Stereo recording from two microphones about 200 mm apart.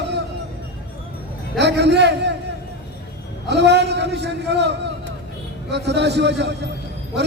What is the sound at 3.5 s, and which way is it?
A man's voice, 55° right (ahead or behind).